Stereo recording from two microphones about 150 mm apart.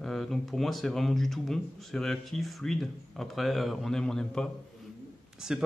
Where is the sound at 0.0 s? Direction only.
Centre (ahead or behind).